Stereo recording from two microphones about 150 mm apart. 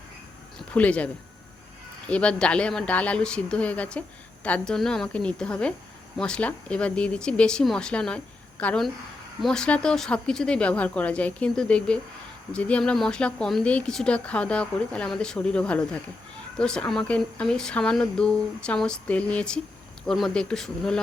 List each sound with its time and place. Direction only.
0.7 s speech: 10° left (ahead or behind)